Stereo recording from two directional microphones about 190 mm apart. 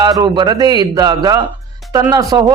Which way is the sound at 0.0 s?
20° right (ahead or behind).